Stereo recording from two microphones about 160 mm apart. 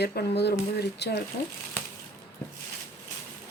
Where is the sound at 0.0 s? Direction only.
85° left.